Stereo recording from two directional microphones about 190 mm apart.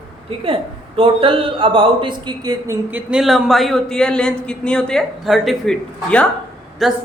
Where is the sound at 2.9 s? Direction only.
5° right (ahead or behind).